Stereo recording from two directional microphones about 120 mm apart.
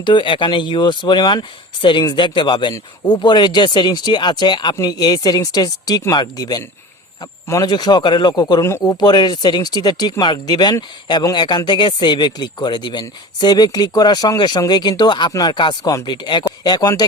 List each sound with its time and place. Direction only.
0.0 s speech: 40° left (ahead or behind)